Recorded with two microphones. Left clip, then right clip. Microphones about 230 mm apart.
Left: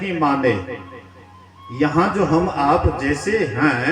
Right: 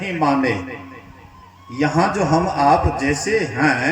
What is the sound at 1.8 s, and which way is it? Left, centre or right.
A man's voice, right.